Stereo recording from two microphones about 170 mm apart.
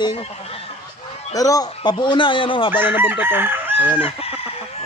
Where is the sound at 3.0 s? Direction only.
10° right (ahead or behind).